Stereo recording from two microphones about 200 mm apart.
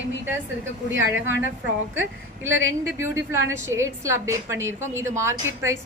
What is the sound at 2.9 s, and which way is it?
A woman's voice, 15° right (ahead or behind).